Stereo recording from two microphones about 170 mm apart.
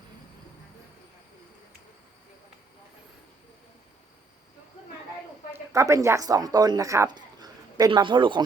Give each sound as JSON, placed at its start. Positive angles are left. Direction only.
{"t": 5.5, "sound": "speech", "side_deg": -15}